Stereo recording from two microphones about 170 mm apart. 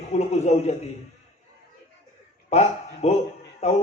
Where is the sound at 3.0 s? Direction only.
40° left (ahead or behind).